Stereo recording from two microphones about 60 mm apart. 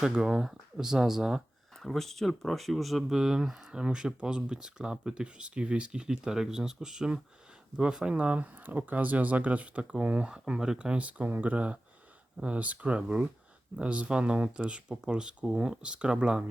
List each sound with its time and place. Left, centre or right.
0.0 s speech: centre
1.8 s speech: centre